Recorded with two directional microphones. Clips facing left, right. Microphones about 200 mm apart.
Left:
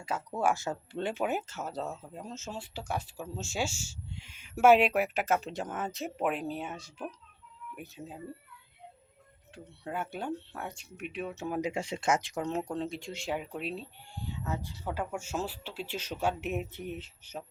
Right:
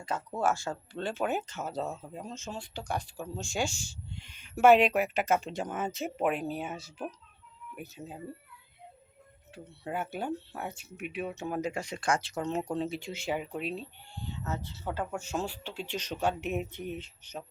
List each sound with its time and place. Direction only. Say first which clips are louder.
0.3 s speech: even; 15° left (ahead or behind)
1.2 s speech: right 1 dB; 5° left (ahead or behind)
9.8 s speech: right 1 dB; 5° right (ahead or behind)
11.6 s speech: left 1 dB; 25° left (ahead or behind)
12.5 s speech: right 2 dB; centre (ahead or behind)
14.4 s speech: even; 15° left (ahead or behind)